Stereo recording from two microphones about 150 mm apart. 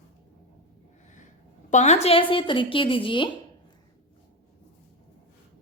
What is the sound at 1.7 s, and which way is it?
A woman's voice, 50° left (ahead or behind).